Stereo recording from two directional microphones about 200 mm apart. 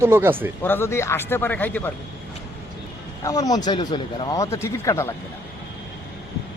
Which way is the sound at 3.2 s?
15° left (ahead or behind).